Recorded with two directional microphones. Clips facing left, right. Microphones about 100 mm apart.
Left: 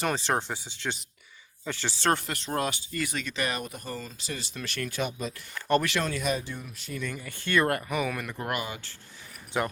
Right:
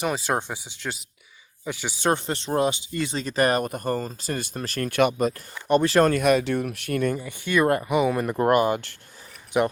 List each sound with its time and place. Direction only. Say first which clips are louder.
0.0 s speech: right 2 dB; 10° right (ahead or behind)
2.2 s speech: right 7 dB; 25° right (ahead or behind)
4.9 s speech: right 13 dB; 65° right (ahead or behind)
5.5 s speech: right 3 dB; 15° right (ahead or behind)
6.0 s speech: right 11 dB; 55° right (ahead or behind)
7.3 s speech: right 2 dB; 15° right (ahead or behind); by 9.0 s 55° right (ahead or behind)
9.5 s speech: right 7 dB; 15° right (ahead or behind)